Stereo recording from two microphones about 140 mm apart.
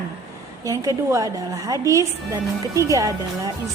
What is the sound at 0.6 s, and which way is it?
A woman's voice, 25° right (ahead or behind).